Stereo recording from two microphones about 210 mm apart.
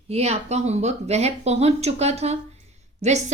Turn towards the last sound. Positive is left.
turn(degrees=-35)  # may be behind; listen again after turning